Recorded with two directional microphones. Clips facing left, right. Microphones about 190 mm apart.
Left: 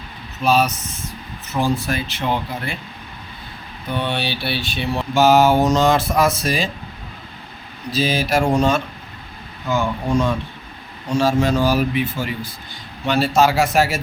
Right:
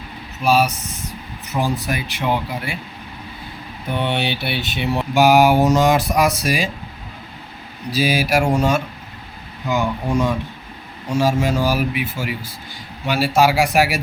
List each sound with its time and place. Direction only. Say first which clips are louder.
0.4 s speech: even; 10° right (ahead or behind)
3.8 s speech: right 2 dB; 20° right (ahead or behind)
7.9 s speech: right 1 dB; 10° right (ahead or behind)
11.1 s speech: left 1 dB; 10° right (ahead or behind)